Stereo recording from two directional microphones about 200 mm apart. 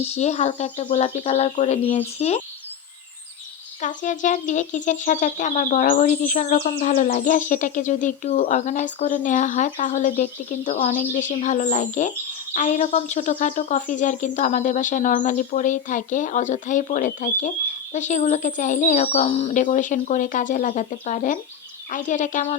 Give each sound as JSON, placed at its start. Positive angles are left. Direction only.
{"t": 0.1, "sound": "speech", "side_deg": 30}
{"t": 3.8, "sound": "speech", "side_deg": 40}